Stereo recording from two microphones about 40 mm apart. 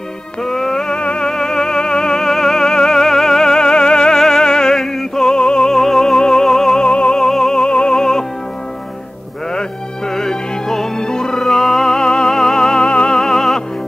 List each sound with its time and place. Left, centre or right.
0.4 s music: centre
1.3 s music: centre
5.7 s music: centre
6.9 s music: left
7.2 s music: centre
7.5 s music: left
9.5 s music: centre
13.2 s music: centre